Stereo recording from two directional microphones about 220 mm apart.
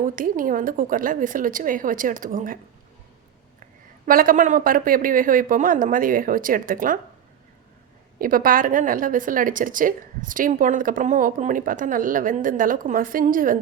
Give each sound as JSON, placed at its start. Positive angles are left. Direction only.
{"t": 0.0, "sound": "a woman's voice", "side_deg": -40}
{"t": 4.0, "sound": "a woman's voice", "side_deg": -40}
{"t": 8.2, "sound": "a woman's voice", "side_deg": -40}